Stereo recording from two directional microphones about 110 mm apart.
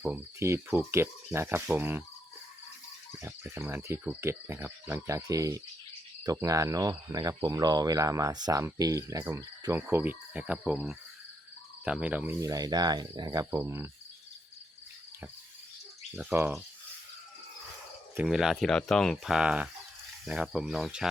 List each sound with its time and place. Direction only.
0.0 s speech: 20° right (ahead or behind)
3.5 s speech: 20° right (ahead or behind)
9.8 s speech: 15° right (ahead or behind)
12.4 s speech: 35° right (ahead or behind)
13.4 s speech: 25° right (ahead or behind)
16.3 s speech: 20° right (ahead or behind)
18.2 s speech: 5° right (ahead or behind)